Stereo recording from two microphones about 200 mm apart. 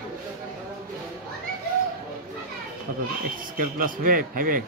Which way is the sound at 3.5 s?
45° right (ahead or behind).